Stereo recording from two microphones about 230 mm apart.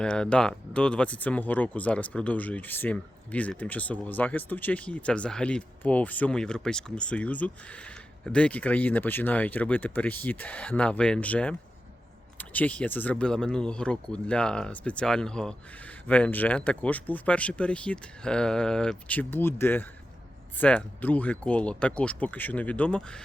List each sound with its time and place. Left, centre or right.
0.0 s speech: centre